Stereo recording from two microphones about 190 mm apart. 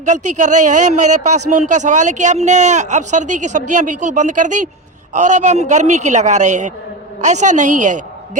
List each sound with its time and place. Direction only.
0.0 s speech: 40° right (ahead or behind)